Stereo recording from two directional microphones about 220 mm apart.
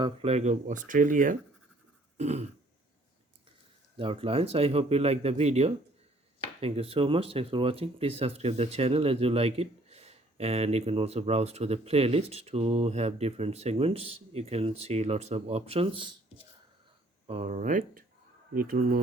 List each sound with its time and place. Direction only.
0.0 s speech: 25° right (ahead or behind)
2.1 s throat clearing: 30° right (ahead or behind)
3.9 s speech: 25° right (ahead or behind)
17.2 s speech: 30° right (ahead or behind)